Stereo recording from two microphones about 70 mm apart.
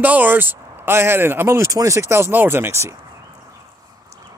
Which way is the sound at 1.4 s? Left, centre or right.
Right.